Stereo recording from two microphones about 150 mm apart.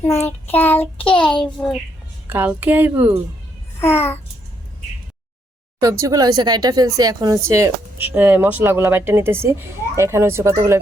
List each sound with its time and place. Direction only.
0.0 s child singing: 15° left (ahead or behind)
2.3 s speech: 15° right (ahead or behind)
3.8 s child singing: 15° left (ahead or behind)
5.8 s speech: 20° right (ahead or behind)